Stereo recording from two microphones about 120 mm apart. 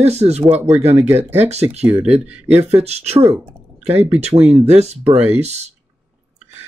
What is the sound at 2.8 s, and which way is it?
Speech, 60° right (ahead or behind).